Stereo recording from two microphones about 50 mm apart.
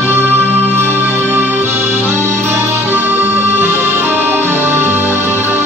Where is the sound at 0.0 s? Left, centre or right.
Right.